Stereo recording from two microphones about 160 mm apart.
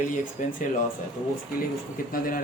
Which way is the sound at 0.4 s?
50° left (ahead or behind).